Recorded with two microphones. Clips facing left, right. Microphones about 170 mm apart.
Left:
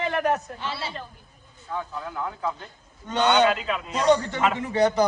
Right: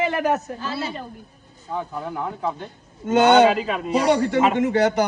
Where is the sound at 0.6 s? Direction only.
25° left (ahead or behind).